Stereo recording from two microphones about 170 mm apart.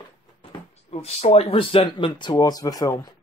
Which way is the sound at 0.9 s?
40° left (ahead or behind).